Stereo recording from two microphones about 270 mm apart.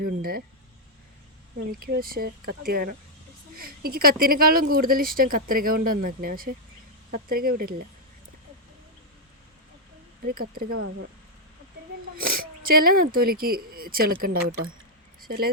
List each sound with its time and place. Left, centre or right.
0.0 s speech: right
1.8 s speech: right
10.2 s speech: right
12.1 s a sound: right
12.8 s speech: right